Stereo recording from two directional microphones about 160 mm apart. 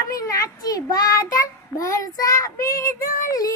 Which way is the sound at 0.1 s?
20° left (ahead or behind).